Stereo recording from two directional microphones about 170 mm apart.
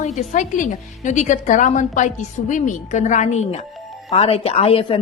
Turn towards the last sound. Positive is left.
turn(degrees=35)  # may be behind; listen again after turning